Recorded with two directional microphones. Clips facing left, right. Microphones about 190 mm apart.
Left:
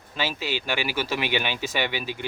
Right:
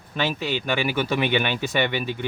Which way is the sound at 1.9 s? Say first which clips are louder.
Right 4 dB; 55° right (ahead or behind).